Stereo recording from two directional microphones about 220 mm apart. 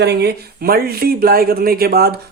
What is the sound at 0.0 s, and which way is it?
Speech, 50° right (ahead or behind).